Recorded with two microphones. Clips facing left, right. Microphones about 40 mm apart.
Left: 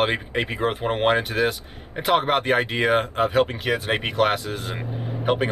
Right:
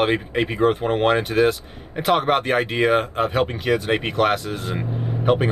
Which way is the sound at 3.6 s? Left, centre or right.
Left.